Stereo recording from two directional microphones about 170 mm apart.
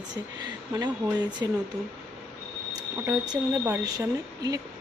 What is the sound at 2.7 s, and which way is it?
Speech, 20° right (ahead or behind).